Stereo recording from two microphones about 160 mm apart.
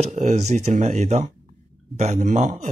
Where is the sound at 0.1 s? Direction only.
50° right (ahead or behind).